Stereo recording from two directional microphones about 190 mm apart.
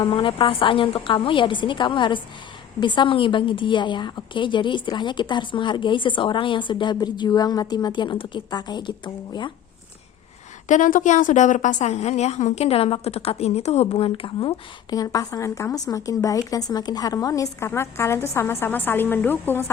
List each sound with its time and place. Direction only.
0.0 s a woman's voice: 25° left (ahead or behind)
10.7 s a woman's voice: 45° left (ahead or behind); by 19.6 s 10° left (ahead or behind)